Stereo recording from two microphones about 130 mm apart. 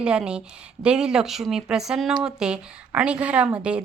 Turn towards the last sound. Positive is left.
turn(degrees=-10)  # may be behind; listen again after turning